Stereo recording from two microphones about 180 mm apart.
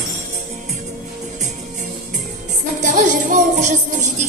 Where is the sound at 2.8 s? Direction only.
45° right (ahead or behind).